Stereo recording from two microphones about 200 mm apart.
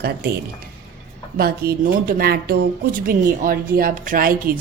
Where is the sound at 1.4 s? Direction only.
50° right (ahead or behind).